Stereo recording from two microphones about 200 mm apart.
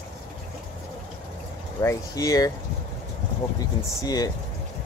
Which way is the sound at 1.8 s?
15° left (ahead or behind).